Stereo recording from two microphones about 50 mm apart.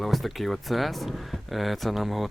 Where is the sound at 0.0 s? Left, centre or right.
Centre.